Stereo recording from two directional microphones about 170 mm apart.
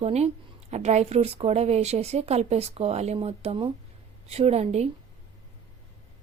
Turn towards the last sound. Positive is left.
turn(degrees=-40)  # may be behind; listen again after turning